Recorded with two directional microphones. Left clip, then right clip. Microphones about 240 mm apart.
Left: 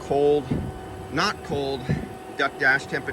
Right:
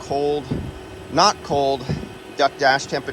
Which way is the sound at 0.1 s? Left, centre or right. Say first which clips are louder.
Left 1 dB; centre.